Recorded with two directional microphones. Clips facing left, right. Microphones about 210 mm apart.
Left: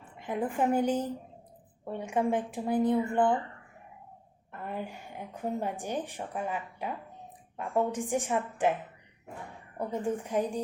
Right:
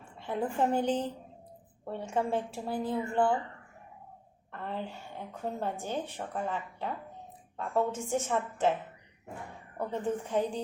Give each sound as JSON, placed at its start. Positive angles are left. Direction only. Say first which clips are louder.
{"t": 0.2, "sound": "a woman's voice", "louder": "even", "side_deg": 15}
{"t": 4.5, "sound": "a woman's voice", "louder": "even", "side_deg": 10}
{"t": 9.7, "sound": "a woman's voice", "louder": "left 1 dB", "side_deg": 10}